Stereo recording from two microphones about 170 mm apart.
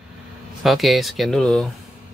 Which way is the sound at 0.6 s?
Centre (ahead or behind).